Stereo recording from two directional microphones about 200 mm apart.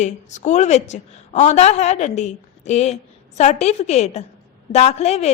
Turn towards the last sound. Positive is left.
turn(degrees=30)  # may be behind; listen again after turning